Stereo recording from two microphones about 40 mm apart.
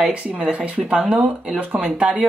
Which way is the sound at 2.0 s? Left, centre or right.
Right.